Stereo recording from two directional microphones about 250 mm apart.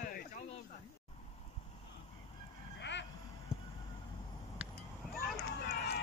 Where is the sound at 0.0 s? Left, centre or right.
Left.